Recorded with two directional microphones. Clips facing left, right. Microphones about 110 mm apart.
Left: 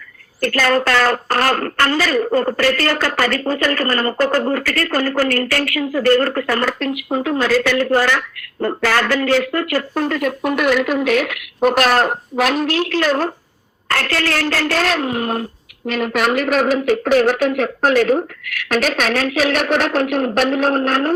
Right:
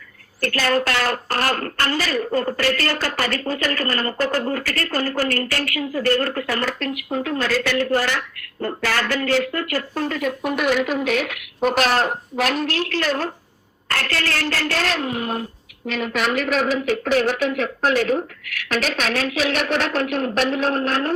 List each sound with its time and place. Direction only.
0.9 s a woman's voice: 70° left (ahead or behind); by 6.7 s 50° left (ahead or behind)
7.1 s a woman's voice: 90° left
7.4 s a woman's voice: 55° left (ahead or behind)